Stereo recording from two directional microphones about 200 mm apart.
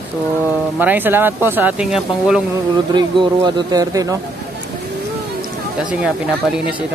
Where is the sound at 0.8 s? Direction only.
10° right (ahead or behind).